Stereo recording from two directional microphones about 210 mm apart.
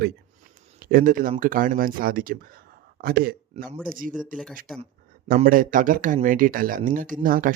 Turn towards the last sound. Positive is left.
turn(degrees=-40)  # may be behind; listen again after turning